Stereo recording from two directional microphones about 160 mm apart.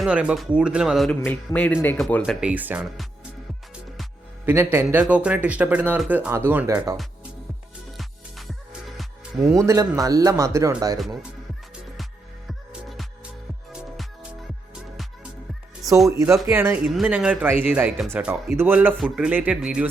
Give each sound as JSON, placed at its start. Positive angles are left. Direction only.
{"t": 0.0, "sound": "speech", "side_deg": -5}
{"t": 1.2, "sound": "speech", "side_deg": 10}
{"t": 4.4, "sound": "a man's voice", "side_deg": -15}
{"t": 9.4, "sound": "a man's voice", "side_deg": -15}
{"t": 10.9, "sound": "speech", "side_deg": 0}
{"t": 12.5, "sound": "music", "side_deg": 0}
{"t": 16.0, "sound": "a man's voice", "side_deg": -20}